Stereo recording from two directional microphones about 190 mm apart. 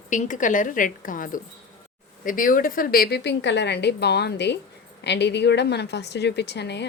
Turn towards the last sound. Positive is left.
turn(degrees=65)  # may be behind; listen again after turning